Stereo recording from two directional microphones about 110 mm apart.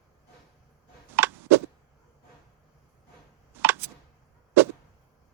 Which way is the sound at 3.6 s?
20° right (ahead or behind).